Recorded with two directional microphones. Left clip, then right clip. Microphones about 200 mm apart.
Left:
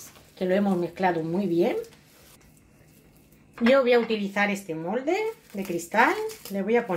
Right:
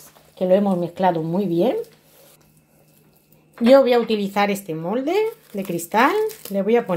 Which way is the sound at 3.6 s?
35° right (ahead or behind).